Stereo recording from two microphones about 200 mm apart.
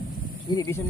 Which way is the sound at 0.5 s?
15° left (ahead or behind).